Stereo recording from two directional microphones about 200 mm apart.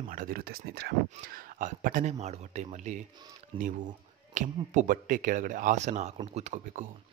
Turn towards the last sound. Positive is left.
turn(degrees=-40)  # may be behind; listen again after turning